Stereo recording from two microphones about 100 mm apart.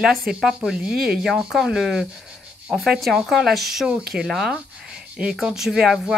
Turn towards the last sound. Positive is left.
turn(degrees=-5)  # may be behind; listen again after turning